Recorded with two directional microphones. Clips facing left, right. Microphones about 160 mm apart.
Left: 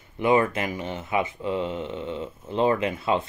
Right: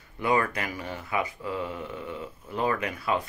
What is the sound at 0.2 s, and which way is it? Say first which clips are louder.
Speech: left 5 dB; 20° left (ahead or behind).